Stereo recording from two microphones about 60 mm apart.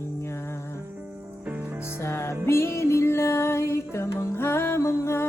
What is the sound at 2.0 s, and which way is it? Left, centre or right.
Music, left.